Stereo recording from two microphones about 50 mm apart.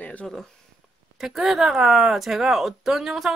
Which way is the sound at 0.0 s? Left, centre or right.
Left.